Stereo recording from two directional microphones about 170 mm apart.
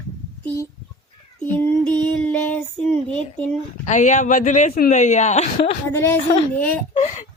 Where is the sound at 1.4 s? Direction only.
10° left (ahead or behind).